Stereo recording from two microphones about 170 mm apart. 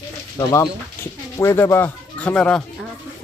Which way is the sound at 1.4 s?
15° left (ahead or behind).